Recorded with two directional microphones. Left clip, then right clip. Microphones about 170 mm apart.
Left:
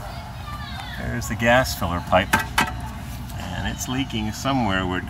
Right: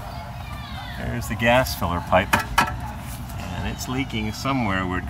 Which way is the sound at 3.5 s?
5° right (ahead or behind).